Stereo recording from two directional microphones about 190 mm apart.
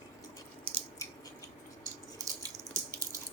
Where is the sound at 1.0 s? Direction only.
15° left (ahead or behind).